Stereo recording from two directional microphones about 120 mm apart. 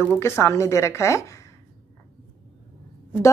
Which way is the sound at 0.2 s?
25° left (ahead or behind).